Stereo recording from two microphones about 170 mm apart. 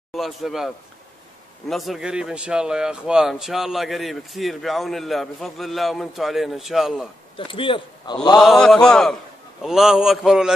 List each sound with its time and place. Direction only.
0.1 s speech: centre (ahead or behind)
7.3 s a man's voice: 30° left (ahead or behind)
8.4 s speech: 5° left (ahead or behind)